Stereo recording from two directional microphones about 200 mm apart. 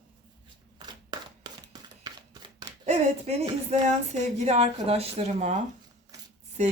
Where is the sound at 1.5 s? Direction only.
20° right (ahead or behind).